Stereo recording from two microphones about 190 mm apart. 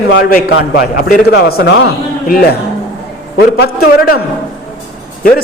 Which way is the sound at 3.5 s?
55° left (ahead or behind).